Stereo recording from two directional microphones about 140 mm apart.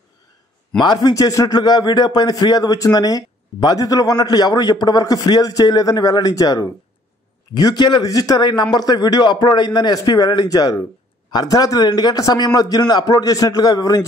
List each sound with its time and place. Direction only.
0.7 s a man's voice: 30° left (ahead or behind)